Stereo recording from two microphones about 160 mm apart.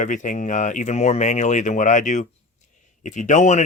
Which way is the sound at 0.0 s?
50° left (ahead or behind).